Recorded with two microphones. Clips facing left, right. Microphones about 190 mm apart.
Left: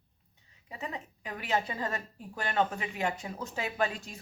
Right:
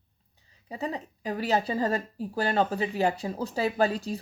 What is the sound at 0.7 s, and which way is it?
Speech, 35° right (ahead or behind).